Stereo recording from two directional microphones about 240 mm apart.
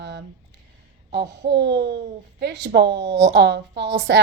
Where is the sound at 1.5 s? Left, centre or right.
Right.